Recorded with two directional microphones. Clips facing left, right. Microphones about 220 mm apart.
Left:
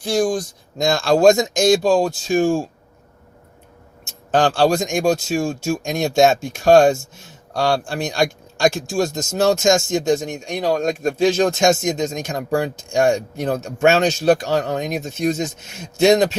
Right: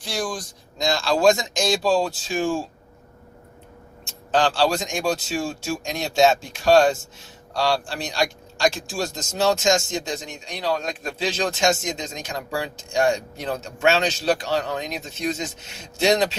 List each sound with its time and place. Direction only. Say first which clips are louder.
0.0 s speech: left 10 dB; 45° left (ahead or behind)
4.3 s speech: left 4 dB; 50° left (ahead or behind)